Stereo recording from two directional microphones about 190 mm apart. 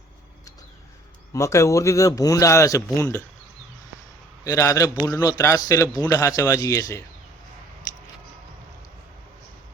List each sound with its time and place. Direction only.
1.3 s a man's voice: 15° left (ahead or behind)
4.4 s a man's voice: 15° left (ahead or behind)